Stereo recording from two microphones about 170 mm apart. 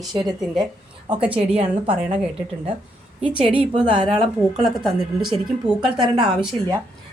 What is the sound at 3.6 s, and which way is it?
Speech, 35° right (ahead or behind).